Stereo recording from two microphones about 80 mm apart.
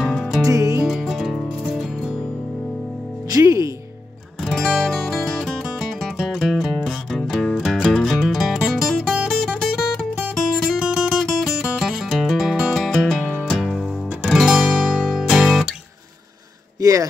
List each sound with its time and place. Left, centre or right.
0.0 s music: centre
0.4 s music: right
0.8 s music: centre
3.3 s music: right
4.4 s music: centre
13.2 s music: right
13.5 s music: centre
16.8 s a sound: right